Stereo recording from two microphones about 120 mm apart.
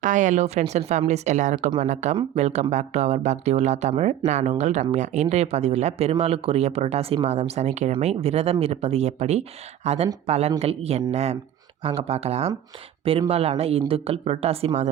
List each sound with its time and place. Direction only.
0.0 s speech: 90° right
2.3 s speech: 70° right (ahead or behind)
8.0 s speech: 60° right (ahead or behind)
11.8 s speech: 50° right (ahead or behind)